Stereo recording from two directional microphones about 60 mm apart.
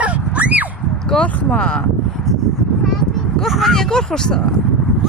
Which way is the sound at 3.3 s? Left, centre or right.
Centre.